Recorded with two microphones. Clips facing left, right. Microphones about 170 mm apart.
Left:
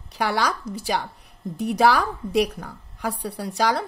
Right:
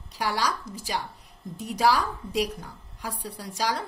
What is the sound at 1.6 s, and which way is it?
A woman's voice, 65° left (ahead or behind).